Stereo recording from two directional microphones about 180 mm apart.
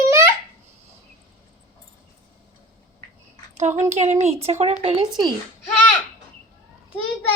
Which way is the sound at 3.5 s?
40° right (ahead or behind).